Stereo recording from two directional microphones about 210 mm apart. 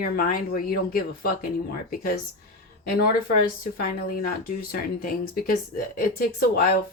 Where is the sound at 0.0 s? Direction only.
40° left (ahead or behind).